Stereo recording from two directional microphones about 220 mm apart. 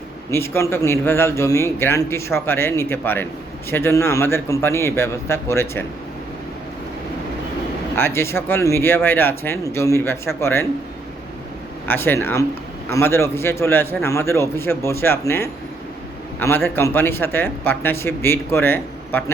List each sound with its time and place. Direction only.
0.3 s a man's voice: 10° left (ahead or behind)
7.9 s a man's voice: 10° left (ahead or behind)
11.9 s a man's voice: 10° left (ahead or behind)
16.6 s a man's voice: 10° left (ahead or behind)